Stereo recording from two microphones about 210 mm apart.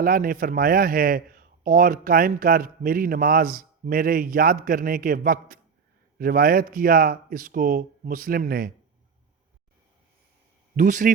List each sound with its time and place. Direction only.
0.0 s a man's voice: 45° right (ahead or behind)
10.8 s speech: 35° right (ahead or behind)